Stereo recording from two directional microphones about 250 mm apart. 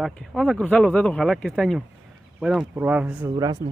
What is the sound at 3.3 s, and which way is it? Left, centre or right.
Speech, centre.